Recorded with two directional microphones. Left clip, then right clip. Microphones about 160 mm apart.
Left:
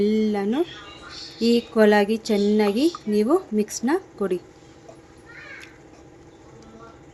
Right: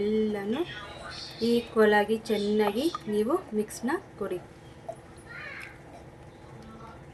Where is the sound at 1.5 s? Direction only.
60° left (ahead or behind).